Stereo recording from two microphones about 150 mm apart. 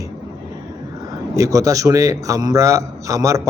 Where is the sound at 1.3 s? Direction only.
20° right (ahead or behind).